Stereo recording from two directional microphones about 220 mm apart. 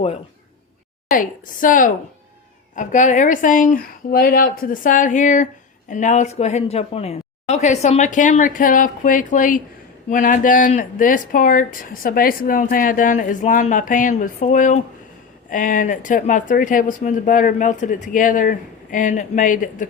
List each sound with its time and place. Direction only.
1.1 s speech: 40° left (ahead or behind)